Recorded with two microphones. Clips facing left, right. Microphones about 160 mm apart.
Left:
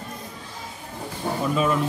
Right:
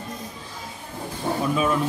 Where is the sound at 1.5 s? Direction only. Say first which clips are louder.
Left 1 dB; 5° right (ahead or behind).